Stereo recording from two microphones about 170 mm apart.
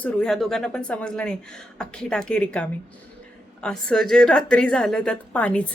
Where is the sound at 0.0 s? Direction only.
5° left (ahead or behind).